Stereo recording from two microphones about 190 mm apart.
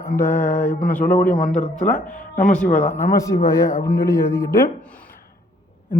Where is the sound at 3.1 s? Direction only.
15° left (ahead or behind).